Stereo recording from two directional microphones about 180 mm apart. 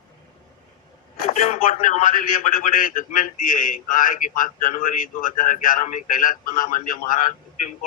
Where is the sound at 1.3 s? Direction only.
40° left (ahead or behind).